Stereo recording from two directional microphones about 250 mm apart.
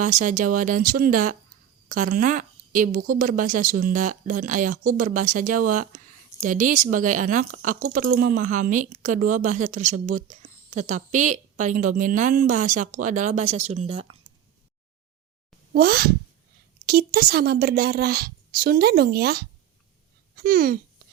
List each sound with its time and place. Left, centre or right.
0.0 s a woman's voice: right
15.7 s a woman's voice: right